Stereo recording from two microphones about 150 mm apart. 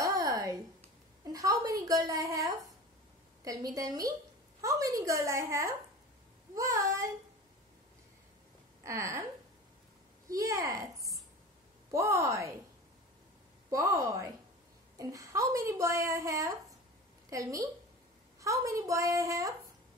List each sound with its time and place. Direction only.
0.0 s a sound: 25° right (ahead or behind)
1.3 s speech: 25° right (ahead or behind)
8.8 s speech: 20° right (ahead or behind)
10.3 s speech: 20° right (ahead or behind)
13.7 s speech: 20° right (ahead or behind)